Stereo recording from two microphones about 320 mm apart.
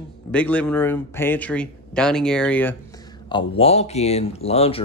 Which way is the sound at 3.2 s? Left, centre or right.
Centre.